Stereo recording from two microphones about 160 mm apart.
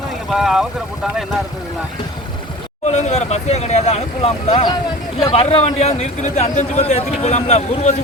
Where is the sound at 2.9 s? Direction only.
45° left (ahead or behind).